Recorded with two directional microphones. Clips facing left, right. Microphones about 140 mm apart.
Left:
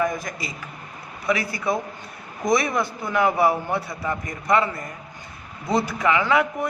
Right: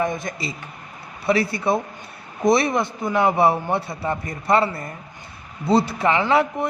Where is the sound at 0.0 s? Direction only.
25° right (ahead or behind).